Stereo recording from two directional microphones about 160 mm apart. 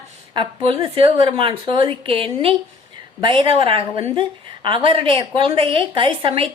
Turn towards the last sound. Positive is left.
turn(degrees=-30)  # may be behind; listen again after turning